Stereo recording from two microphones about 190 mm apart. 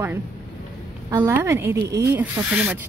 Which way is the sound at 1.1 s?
15° right (ahead or behind).